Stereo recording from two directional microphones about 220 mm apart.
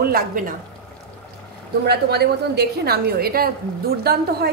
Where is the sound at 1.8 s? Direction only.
45° right (ahead or behind).